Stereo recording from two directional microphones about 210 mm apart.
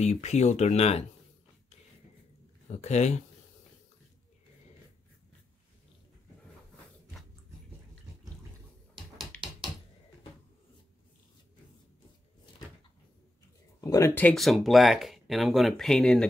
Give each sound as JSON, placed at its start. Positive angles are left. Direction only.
{"t": 0.0, "sound": "speech", "side_deg": 30}
{"t": 2.7, "sound": "speech", "side_deg": 30}
{"t": 8.9, "sound": "a sound", "side_deg": 0}
{"t": 13.7, "sound": "speech", "side_deg": 15}